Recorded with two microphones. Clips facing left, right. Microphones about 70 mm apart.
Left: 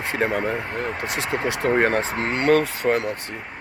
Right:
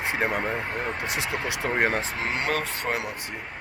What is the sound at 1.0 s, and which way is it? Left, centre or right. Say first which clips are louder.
Speech: left 4 dB; right.